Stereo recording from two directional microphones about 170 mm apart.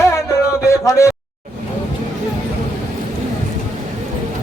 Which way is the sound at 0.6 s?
15° left (ahead or behind).